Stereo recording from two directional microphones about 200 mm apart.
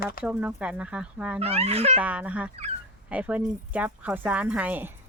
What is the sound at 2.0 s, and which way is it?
Speech, 5° right (ahead or behind).